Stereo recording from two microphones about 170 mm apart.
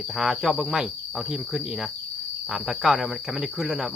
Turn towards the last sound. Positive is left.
turn(degrees=-5)  # may be behind; listen again after turning